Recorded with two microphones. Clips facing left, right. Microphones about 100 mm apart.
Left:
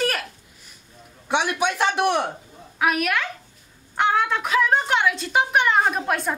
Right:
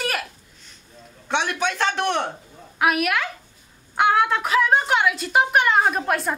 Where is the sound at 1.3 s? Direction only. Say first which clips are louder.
Left 1 dB; 10° left (ahead or behind).